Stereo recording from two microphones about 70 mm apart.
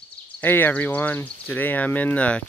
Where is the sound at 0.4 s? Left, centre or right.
Left.